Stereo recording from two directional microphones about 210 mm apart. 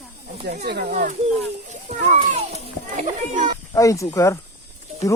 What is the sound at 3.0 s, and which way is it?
Speech, 35° right (ahead or behind).